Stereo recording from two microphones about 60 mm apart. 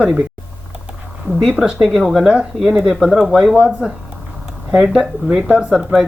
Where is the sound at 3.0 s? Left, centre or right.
Centre.